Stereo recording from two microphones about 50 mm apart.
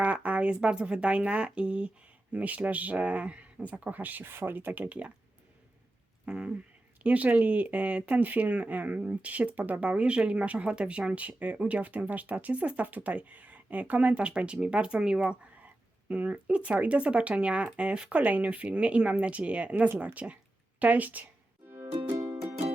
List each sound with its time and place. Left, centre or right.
0.0 s speech: right
6.2 s a sound: right
7.0 s speech: right
15.6 s speech: right
21.7 s music: right